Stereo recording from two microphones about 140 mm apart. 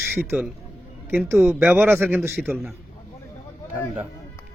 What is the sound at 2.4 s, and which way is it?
Speech, 5° right (ahead or behind).